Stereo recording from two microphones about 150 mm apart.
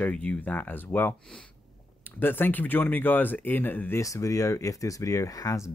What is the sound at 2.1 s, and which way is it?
Speech, 15° left (ahead or behind).